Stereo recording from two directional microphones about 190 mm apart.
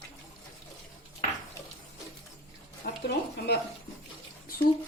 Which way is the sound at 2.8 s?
50° left (ahead or behind).